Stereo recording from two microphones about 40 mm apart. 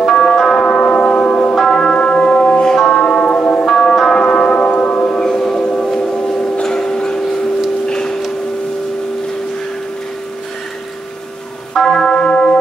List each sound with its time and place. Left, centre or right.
0.0 s music: centre
1.7 s church bell: left
2.9 s music: left
3.6 s music: centre
4.2 s music: left
4.7 s church bell: left
5.4 s a sound: centre
11.7 s church bell: centre